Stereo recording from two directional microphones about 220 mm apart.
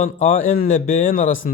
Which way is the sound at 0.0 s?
35° left (ahead or behind).